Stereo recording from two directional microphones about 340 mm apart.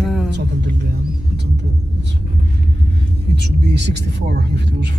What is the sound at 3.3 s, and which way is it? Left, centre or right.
Speech, right.